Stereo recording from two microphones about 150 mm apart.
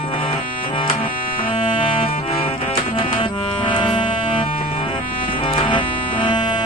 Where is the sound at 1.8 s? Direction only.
40° left (ahead or behind).